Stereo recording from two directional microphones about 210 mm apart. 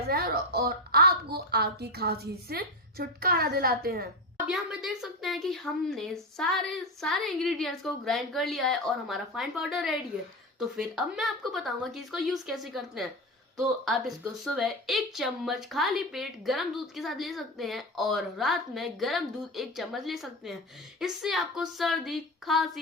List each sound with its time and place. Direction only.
0.1 s a woman's voice: 45° right (ahead or behind)
4.4 s a woman's voice: centre (ahead or behind)